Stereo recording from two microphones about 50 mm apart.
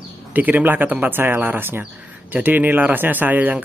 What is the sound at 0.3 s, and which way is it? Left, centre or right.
Speech, right.